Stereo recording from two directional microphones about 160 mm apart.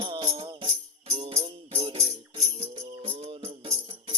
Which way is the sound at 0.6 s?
40° right (ahead or behind).